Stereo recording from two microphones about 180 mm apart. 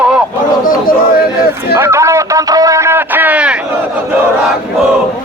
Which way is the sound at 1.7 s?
15° right (ahead or behind).